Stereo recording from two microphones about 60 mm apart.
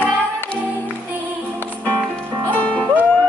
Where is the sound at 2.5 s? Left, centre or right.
Left.